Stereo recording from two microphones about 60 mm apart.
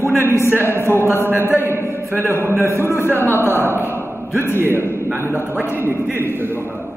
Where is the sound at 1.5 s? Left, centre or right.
Right.